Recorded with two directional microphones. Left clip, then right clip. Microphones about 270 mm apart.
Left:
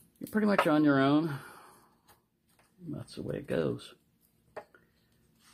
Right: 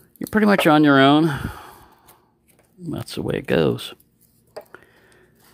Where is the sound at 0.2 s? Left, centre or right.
Right.